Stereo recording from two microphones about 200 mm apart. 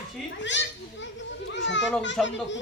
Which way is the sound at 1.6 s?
65° left (ahead or behind).